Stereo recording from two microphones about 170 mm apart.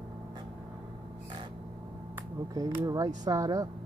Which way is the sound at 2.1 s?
20° right (ahead or behind).